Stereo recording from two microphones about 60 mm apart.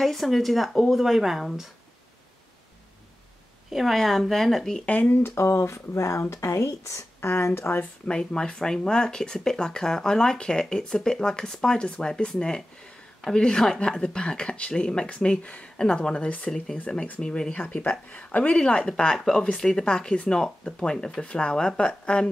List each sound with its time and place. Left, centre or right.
0.0 s speech: centre
3.7 s speech: centre
4.8 s speech: left
5.2 s speech: left
8.1 s speech: centre